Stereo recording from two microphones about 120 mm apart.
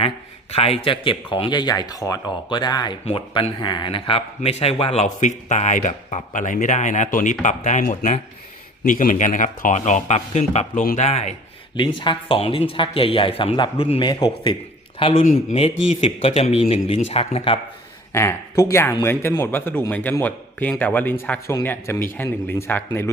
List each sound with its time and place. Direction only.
0.5 s a man's voice: 55° left (ahead or behind)
11.8 s speech: 45° left (ahead or behind)
14.0 s speech: 35° left (ahead or behind)
15.2 s speech: 90° left
15.6 s speech: 55° left (ahead or behind)
18.1 s a man's voice: 20° left (ahead or behind)